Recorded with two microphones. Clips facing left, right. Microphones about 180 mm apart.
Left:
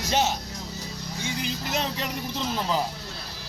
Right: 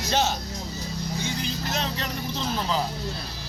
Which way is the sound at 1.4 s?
15° left (ahead or behind).